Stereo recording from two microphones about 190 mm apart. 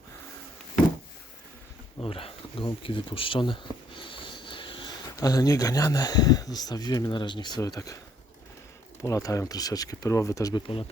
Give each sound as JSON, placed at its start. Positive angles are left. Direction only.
{"t": 2.0, "sound": "speech", "side_deg": 30}
{"t": 9.0, "sound": "speech", "side_deg": 15}